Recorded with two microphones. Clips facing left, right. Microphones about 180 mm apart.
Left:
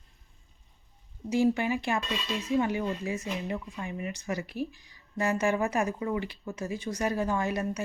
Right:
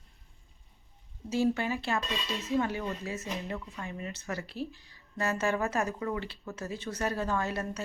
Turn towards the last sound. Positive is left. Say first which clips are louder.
# left 3 dB
turn(degrees=15)  # may be behind; listen again after turning